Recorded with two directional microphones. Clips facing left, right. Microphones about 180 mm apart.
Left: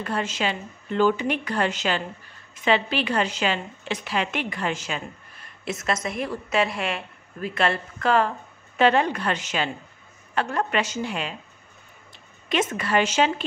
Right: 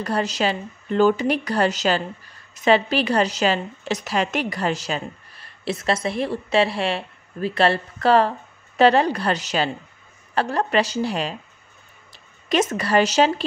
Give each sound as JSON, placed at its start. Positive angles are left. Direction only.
{"t": 0.0, "sound": "a woman's voice", "side_deg": -40}
{"t": 12.4, "sound": "a woman's voice", "side_deg": -40}